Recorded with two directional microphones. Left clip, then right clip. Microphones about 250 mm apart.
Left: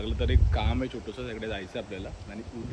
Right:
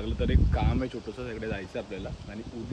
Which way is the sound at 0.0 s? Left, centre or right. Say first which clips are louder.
Right 1 dB; centre.